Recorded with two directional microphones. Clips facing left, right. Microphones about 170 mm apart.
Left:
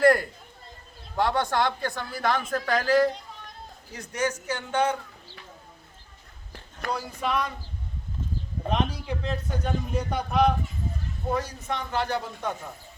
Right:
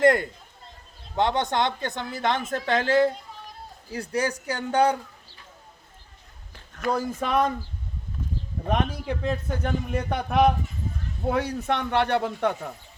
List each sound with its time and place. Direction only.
0.0 s a sound: 20° right (ahead or behind)
1.1 s speech: 20° right (ahead or behind); by 4.9 s 35° right (ahead or behind)
6.9 s speech: 50° right (ahead or behind)
8.7 s a man's voice: 50° right (ahead or behind)